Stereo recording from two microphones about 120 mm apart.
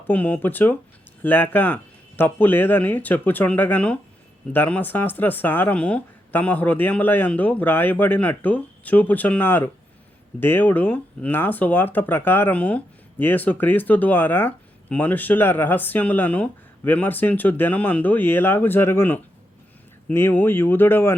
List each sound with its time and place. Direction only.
0.1 s speech: 15° left (ahead or behind)